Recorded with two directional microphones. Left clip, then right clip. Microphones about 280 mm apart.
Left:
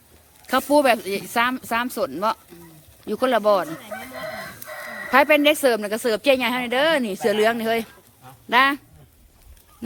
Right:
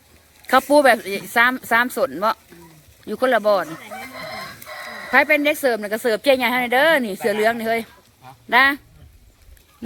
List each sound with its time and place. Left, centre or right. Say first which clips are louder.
0.4 s speech: right 4 dB; centre
4.3 s a sound: right 1 dB; right
5.1 s speech: even; centre